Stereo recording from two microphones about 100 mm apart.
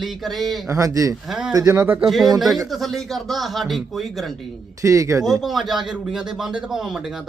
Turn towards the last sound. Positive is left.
turn(degrees=-5)  # may be behind; listen again after turning